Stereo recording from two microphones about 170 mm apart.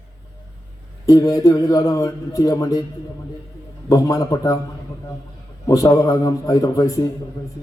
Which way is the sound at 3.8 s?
20° left (ahead or behind).